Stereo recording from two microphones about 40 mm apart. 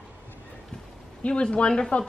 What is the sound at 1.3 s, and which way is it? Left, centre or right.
Speech, left.